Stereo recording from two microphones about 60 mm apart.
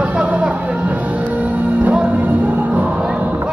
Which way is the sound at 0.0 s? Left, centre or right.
Right.